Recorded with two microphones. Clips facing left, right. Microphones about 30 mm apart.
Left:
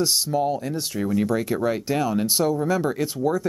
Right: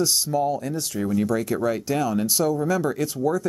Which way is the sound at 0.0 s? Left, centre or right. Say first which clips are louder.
Even; left.